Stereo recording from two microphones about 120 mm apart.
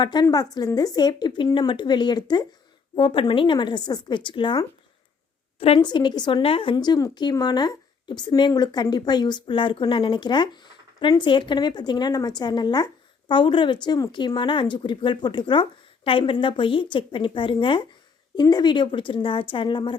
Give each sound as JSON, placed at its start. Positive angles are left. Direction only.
{"t": 0.0, "sound": "speech", "side_deg": 35}
{"t": 2.9, "sound": "speech", "side_deg": 45}
{"t": 5.5, "sound": "a woman's voice", "side_deg": 55}
{"t": 5.8, "sound": "speech", "side_deg": 40}